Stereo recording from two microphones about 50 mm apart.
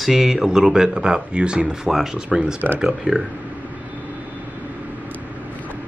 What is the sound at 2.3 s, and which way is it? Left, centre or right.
Speech, centre.